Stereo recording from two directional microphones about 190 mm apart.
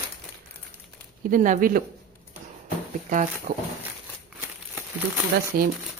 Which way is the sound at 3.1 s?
45° right (ahead or behind).